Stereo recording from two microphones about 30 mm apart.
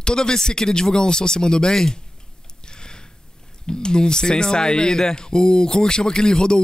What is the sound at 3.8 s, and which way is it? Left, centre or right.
Speech, left.